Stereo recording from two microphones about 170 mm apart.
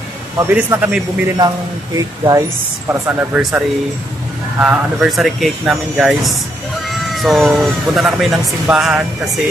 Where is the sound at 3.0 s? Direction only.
10° right (ahead or behind).